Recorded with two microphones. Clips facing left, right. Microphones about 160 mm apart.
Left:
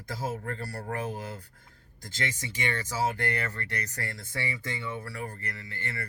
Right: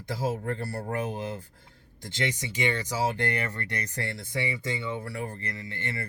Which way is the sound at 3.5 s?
30° right (ahead or behind).